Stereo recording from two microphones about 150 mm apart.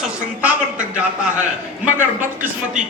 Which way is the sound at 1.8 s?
15° right (ahead or behind).